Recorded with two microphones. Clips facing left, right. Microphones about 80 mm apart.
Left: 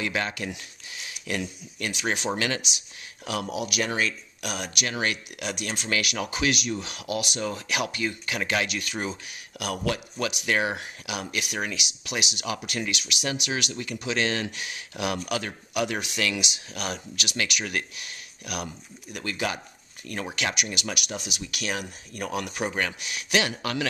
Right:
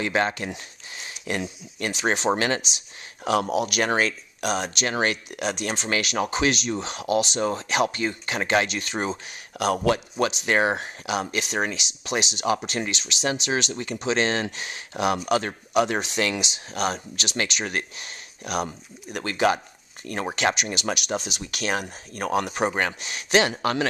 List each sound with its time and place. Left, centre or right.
0.0 s speech: right
3.3 s speech: right